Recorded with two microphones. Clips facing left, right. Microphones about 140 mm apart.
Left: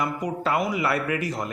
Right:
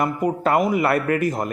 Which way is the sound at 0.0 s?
50° right (ahead or behind).